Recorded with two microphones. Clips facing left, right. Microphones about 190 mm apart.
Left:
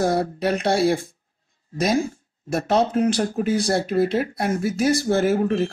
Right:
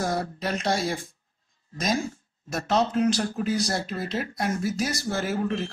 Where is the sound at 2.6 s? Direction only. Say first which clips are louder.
Left 3 dB; 55° left (ahead or behind).